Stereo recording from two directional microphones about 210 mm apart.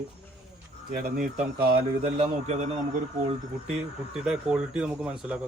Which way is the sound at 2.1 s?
25° right (ahead or behind).